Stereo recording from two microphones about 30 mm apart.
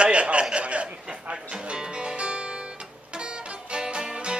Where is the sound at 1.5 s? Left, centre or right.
Right.